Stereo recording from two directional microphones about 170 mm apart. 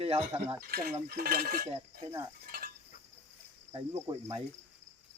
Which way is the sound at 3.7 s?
20° right (ahead or behind).